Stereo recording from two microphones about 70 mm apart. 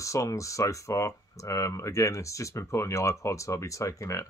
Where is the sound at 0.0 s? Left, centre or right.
Left.